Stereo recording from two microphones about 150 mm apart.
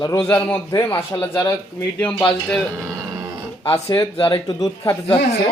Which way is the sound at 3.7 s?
20° left (ahead or behind).